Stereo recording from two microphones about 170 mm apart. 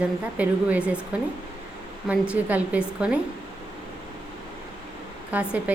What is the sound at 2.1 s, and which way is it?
A woman's voice, 10° right (ahead or behind).